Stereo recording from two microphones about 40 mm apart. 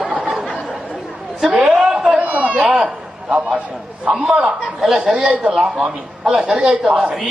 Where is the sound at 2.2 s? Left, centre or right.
Right.